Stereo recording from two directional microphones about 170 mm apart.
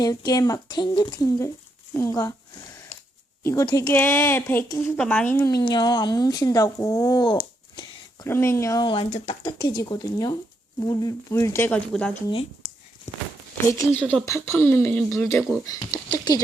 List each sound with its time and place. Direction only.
0.0 s a woman's voice: 20° left (ahead or behind)
3.4 s a woman's voice: 20° left (ahead or behind)
13.1 s speech: 35° left (ahead or behind)
13.7 s speech: 15° left (ahead or behind)
14.0 s speech: 5° left (ahead or behind)
14.3 s speech: 15° left (ahead or behind)
15.9 s a woman's voice: 25° left (ahead or behind)